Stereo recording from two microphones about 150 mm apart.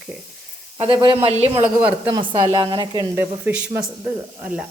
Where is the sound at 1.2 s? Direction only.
45° right (ahead or behind).